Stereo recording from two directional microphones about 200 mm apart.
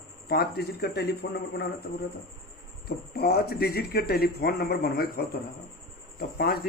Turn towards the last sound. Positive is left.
turn(degrees=50)  # may be behind; listen again after turning